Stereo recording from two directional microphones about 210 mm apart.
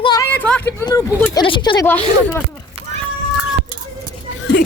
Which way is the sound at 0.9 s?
15° left (ahead or behind).